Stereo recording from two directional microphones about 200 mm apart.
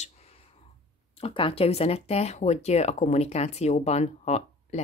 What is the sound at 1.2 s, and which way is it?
Speech, 30° left (ahead or behind).